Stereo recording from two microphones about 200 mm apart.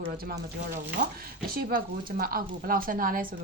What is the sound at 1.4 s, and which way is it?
Speech, 45° right (ahead or behind).